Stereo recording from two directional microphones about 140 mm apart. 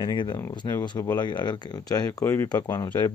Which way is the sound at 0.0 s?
30° left (ahead or behind).